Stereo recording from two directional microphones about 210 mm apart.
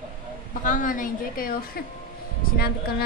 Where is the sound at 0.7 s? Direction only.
40° left (ahead or behind).